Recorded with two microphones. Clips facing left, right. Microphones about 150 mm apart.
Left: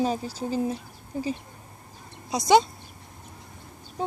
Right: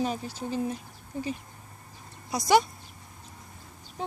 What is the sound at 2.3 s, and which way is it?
Speech, 20° left (ahead or behind).